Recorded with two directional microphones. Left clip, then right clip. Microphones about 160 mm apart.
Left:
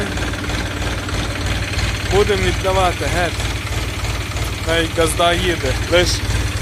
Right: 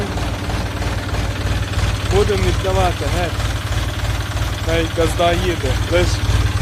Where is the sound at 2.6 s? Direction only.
Centre (ahead or behind).